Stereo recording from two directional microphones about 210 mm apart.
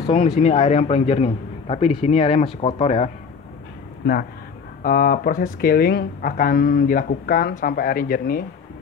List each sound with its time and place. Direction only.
0.4 s speech: 30° left (ahead or behind)
4.0 s speech: 50° left (ahead or behind)